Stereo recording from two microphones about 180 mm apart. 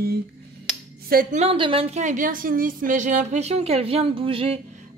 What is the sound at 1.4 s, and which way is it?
A woman's voice, 30° right (ahead or behind).